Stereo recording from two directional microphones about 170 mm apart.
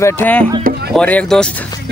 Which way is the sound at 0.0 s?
10° left (ahead or behind).